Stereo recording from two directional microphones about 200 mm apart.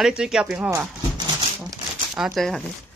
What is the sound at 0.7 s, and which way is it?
Horse, 20° right (ahead or behind).